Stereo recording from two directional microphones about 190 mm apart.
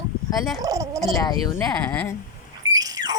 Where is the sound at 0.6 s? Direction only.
20° right (ahead or behind).